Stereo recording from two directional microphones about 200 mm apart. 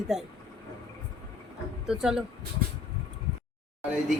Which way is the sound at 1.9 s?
5° right (ahead or behind).